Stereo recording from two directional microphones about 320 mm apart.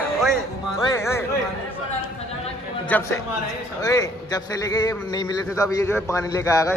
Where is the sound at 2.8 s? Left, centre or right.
Centre.